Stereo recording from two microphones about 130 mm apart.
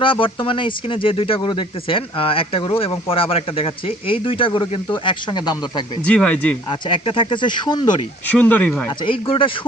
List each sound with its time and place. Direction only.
0.0 s speech: 40° left (ahead or behind)
6.1 s speech: 10° left (ahead or behind)
6.7 s speech: 40° left (ahead or behind)
8.3 s speech: 10° left (ahead or behind)
8.9 s speech: 40° left (ahead or behind)